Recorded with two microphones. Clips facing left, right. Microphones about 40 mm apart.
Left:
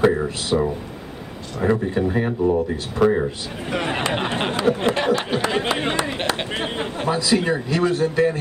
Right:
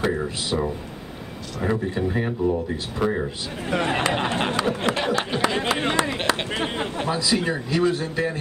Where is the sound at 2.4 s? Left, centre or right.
Left.